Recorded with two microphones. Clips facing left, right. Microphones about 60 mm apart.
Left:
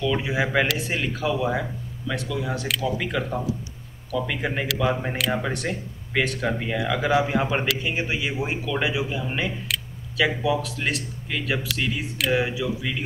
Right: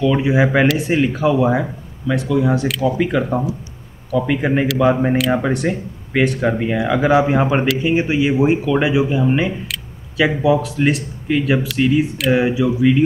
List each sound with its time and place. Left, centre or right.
0.0 s speech: centre